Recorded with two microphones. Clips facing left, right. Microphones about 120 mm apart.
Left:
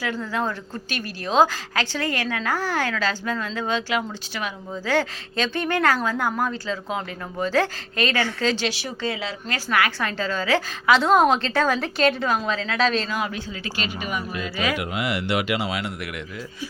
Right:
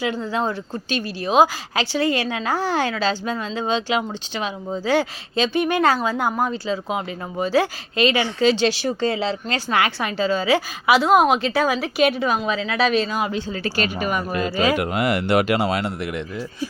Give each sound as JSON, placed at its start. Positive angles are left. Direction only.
{"t": 0.0, "sound": "a woman's voice", "side_deg": -20}
{"t": 8.6, "sound": "a woman's voice", "side_deg": -35}
{"t": 13.5, "sound": "speech", "side_deg": -45}
{"t": 14.5, "sound": "speech", "side_deg": -30}
{"t": 14.8, "sound": "speech", "side_deg": -50}